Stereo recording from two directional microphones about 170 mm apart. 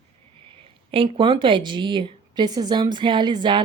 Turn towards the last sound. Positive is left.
turn(degrees=-25)  # may be behind; listen again after turning